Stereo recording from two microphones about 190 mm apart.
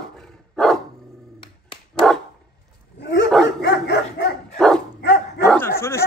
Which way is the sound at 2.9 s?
65° left (ahead or behind).